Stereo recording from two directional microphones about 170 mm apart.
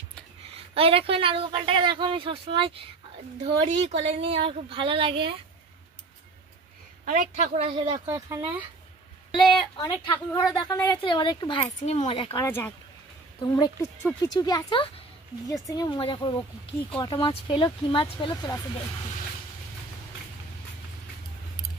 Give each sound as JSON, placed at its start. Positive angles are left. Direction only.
{"t": 0.7, "sound": "speech", "side_deg": -35}
{"t": 7.1, "sound": "speech", "side_deg": -50}
{"t": 8.1, "sound": "speech", "side_deg": -15}
{"t": 9.3, "sound": "a woman's voice", "side_deg": 25}
{"t": 11.8, "sound": "speech", "side_deg": 40}
{"t": 12.4, "sound": "speech", "side_deg": 15}
{"t": 13.4, "sound": "a woman's voice", "side_deg": 25}